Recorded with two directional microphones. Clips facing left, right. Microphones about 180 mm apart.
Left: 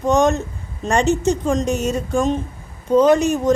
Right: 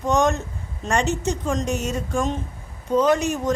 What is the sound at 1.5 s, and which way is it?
Speech, 30° left (ahead or behind).